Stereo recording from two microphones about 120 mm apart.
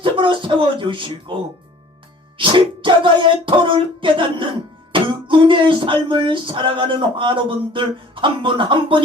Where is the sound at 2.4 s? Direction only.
45° right (ahead or behind).